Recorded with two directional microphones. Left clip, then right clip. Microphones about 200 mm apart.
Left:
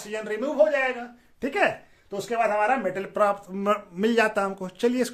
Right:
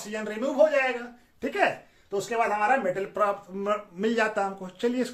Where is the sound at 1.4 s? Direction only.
55° left (ahead or behind).